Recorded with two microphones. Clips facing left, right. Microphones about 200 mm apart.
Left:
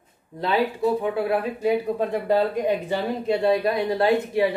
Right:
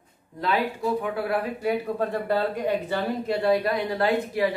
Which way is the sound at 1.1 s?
20° left (ahead or behind).